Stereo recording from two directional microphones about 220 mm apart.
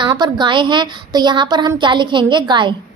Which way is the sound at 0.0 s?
20° right (ahead or behind).